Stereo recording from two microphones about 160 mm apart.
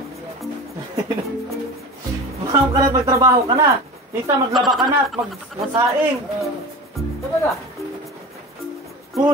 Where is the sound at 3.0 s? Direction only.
20° right (ahead or behind).